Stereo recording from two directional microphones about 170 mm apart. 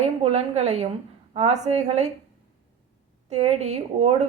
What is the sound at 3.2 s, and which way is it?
A woman's voice, 40° right (ahead or behind).